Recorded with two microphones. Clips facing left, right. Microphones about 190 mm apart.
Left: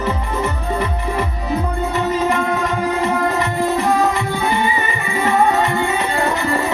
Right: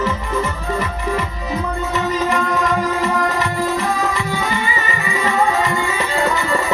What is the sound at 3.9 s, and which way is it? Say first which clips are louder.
Music: left 3 dB; 55° left (ahead or behind).